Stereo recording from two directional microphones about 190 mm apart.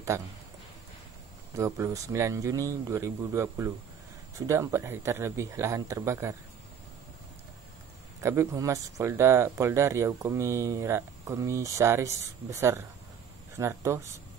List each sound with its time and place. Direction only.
0.1 s speech: 15° right (ahead or behind)
1.5 s speech: 15° right (ahead or behind)
8.2 s speech: 15° right (ahead or behind)